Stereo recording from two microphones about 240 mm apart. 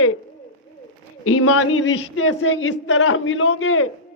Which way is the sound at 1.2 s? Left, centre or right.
Left.